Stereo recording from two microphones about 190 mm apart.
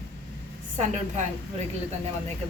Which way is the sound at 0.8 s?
40° right (ahead or behind).